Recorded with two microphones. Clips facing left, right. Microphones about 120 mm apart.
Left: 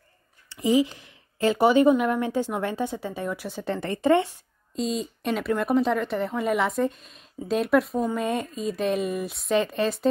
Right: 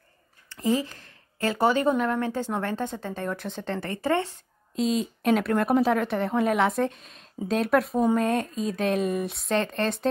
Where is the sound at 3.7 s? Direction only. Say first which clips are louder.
Left 5 dB; 20° left (ahead or behind).